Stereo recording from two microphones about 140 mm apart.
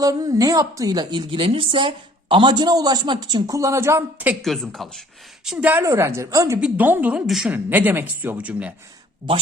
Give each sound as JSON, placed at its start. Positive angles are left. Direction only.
{"t": 0.0, "sound": "a woman's voice", "side_deg": -25}
{"t": 4.4, "sound": "speech", "side_deg": 0}
{"t": 5.5, "sound": "speech", "side_deg": -10}
{"t": 5.8, "sound": "a woman's voice", "side_deg": -20}